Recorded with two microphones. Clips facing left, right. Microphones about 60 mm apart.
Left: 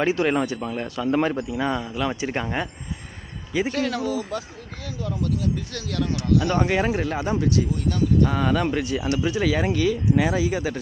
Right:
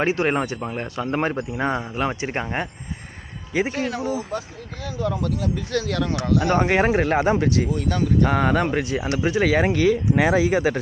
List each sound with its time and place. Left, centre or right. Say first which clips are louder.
0.0 s speech: even; right
3.6 s speech: left 1 dB; centre
4.0 s speech: right 1 dB; right
4.8 s speech: right 3 dB; right
7.6 s speech: right 1 dB; right